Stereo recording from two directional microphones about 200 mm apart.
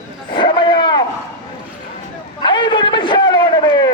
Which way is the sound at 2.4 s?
25° left (ahead or behind).